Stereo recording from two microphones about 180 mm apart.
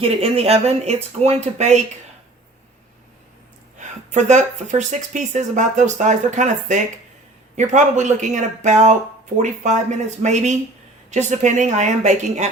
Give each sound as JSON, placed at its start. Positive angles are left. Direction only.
{"t": 0.0, "sound": "speech", "side_deg": -35}
{"t": 3.8, "sound": "speech", "side_deg": -40}